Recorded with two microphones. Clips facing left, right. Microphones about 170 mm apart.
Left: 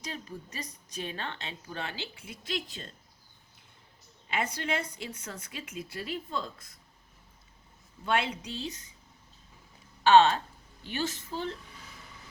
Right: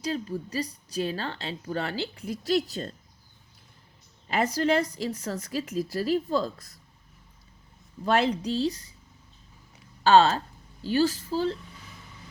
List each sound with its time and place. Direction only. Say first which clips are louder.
0.0 s a woman's voice: right 10 dB; 30° right (ahead or behind)
4.3 s a woman's voice: right 8 dB; 35° right (ahead or behind)
8.0 s a woman's voice: right 6 dB; 35° right (ahead or behind)
10.0 s a woman's voice: right 2 dB; 35° right (ahead or behind)